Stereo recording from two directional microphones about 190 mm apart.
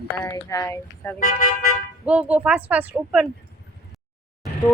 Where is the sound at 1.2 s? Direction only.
45° left (ahead or behind).